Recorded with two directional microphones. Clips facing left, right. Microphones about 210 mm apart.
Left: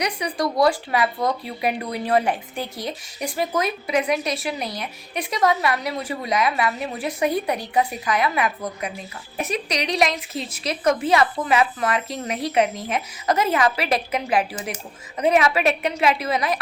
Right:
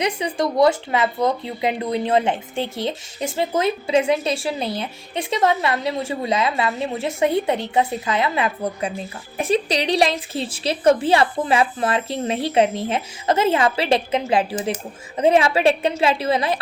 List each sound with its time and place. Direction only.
0.0 s speech: 25° right (ahead or behind)